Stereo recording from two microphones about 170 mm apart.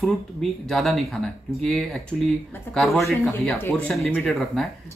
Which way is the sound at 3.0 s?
15° left (ahead or behind).